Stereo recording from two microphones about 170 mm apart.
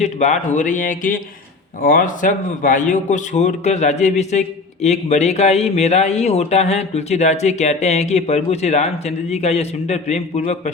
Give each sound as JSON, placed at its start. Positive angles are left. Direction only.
{"t": 0.0, "sound": "speech", "side_deg": 45}